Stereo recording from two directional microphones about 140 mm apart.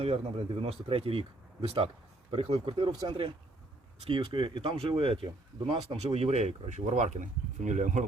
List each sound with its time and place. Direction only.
0.6 s speech: 40° right (ahead or behind); by 8.0 s 60° right (ahead or behind)